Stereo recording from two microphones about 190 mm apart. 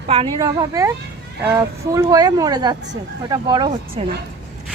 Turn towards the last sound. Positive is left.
turn(degrees=-25)  # may be behind; listen again after turning